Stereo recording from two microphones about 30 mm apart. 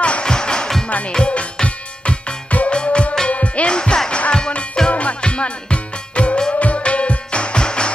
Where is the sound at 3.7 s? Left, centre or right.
Left.